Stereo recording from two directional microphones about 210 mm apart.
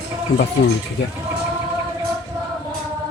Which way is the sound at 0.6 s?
60° left (ahead or behind).